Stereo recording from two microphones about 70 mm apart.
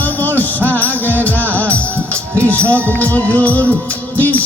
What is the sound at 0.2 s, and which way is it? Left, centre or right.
Music, left.